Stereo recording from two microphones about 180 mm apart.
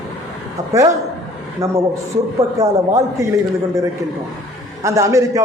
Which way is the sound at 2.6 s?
20° right (ahead or behind).